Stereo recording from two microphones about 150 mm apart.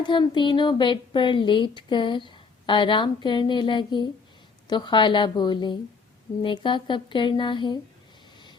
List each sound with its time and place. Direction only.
0.0 s speech: 30° left (ahead or behind)